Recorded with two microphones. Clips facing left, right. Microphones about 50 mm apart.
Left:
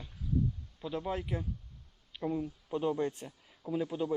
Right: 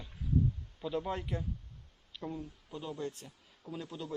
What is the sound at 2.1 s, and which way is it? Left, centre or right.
Speech, left.